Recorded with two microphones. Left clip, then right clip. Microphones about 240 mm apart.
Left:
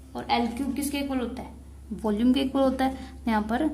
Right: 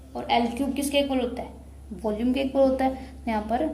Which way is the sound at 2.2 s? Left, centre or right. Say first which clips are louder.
Right 2 dB; left.